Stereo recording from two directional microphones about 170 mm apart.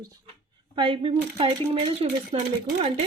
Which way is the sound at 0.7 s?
30° right (ahead or behind).